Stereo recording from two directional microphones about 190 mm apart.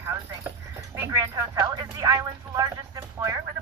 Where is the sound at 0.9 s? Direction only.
15° right (ahead or behind).